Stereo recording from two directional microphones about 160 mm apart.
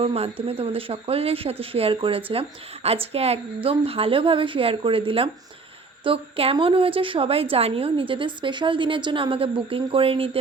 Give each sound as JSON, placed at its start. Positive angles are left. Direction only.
{"t": 0.0, "sound": "a woman's voice", "side_deg": -40}